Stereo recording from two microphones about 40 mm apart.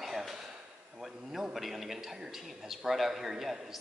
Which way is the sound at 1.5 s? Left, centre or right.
Centre.